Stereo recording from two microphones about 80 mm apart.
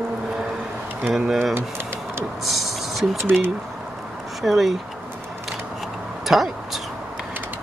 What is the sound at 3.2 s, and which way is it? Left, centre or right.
Speech, right.